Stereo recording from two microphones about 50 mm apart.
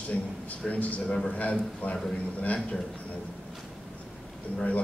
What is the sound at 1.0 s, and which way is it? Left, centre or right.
Speech, centre.